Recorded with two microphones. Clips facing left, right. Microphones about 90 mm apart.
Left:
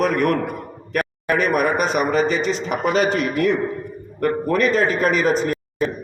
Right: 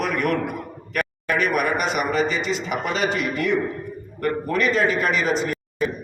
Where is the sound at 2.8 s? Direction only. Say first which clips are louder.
Left 7 dB; 5° left (ahead or behind).